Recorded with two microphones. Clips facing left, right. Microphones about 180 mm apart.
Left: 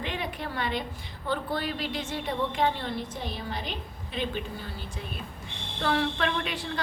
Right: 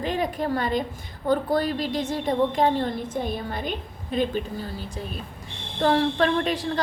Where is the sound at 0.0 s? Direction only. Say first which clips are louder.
Right 8 dB; 40° right (ahead or behind).